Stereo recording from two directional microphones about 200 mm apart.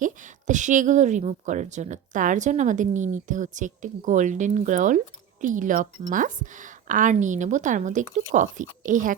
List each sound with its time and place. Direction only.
0.0 s speech: 40° right (ahead or behind)